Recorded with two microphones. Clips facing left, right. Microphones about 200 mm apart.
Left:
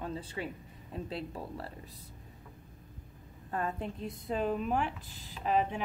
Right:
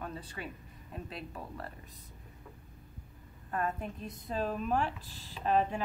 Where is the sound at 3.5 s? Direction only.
25° left (ahead or behind).